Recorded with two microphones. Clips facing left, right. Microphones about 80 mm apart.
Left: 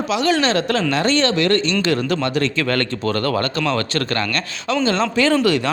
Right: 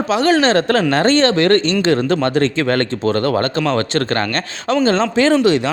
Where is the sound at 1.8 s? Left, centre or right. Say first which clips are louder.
Right 4 dB; right.